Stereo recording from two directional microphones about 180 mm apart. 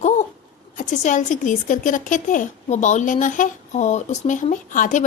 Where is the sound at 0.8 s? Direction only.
45° left (ahead or behind).